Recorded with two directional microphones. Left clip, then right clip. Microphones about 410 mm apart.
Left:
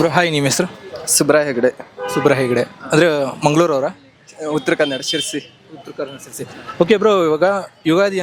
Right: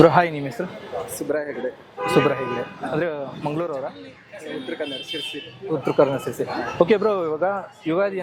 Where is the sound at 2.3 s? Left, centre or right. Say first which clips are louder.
Left 8 dB; left.